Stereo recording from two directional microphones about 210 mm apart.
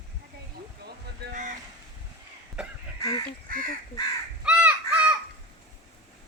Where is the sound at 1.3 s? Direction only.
35° right (ahead or behind).